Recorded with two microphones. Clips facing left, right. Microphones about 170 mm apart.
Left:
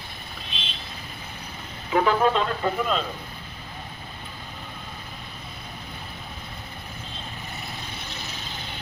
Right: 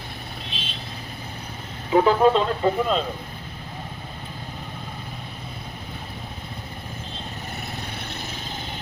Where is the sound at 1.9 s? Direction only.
25° right (ahead or behind).